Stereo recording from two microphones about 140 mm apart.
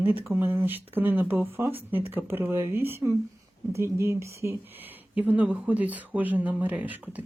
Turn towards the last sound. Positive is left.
turn(degrees=-10)  # may be behind; listen again after turning